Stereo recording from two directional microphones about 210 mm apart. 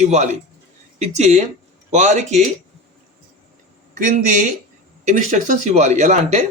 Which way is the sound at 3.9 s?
35° right (ahead or behind).